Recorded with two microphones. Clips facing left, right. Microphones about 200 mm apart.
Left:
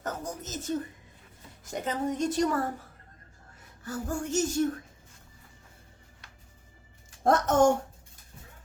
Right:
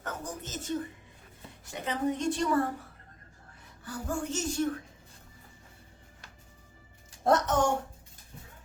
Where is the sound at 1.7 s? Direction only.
45° left (ahead or behind).